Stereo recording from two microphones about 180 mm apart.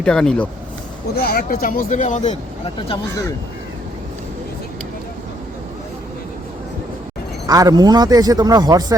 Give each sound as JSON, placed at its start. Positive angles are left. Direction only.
{"t": 0.0, "sound": "speech", "side_deg": 5}
{"t": 1.2, "sound": "speech", "side_deg": 55}
{"t": 7.4, "sound": "a man's voice", "side_deg": -20}